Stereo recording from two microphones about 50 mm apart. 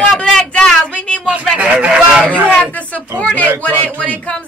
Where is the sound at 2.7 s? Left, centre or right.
Left.